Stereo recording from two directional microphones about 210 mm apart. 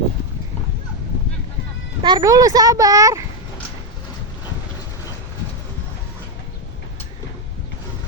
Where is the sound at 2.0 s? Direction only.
20° right (ahead or behind).